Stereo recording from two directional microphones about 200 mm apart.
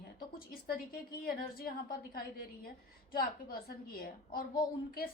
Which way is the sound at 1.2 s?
45° left (ahead or behind).